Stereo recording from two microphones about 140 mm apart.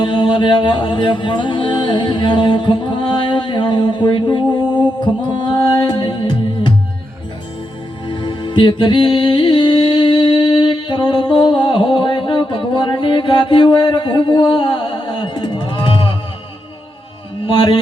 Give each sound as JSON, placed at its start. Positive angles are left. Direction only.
{"t": 0.0, "sound": "music", "side_deg": 35}
{"t": 5.5, "sound": "music", "side_deg": 30}
{"t": 8.0, "sound": "music", "side_deg": 35}
{"t": 17.4, "sound": "speech", "side_deg": 35}